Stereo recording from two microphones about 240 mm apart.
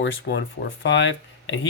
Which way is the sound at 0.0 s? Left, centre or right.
Left.